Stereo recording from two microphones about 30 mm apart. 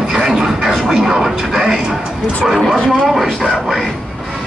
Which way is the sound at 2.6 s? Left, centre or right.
Centre.